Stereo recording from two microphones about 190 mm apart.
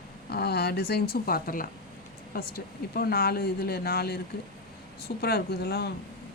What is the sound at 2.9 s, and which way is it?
A woman's voice, 55° left (ahead or behind).